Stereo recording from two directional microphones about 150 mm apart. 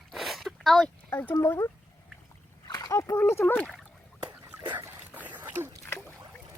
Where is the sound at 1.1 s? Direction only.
15° left (ahead or behind).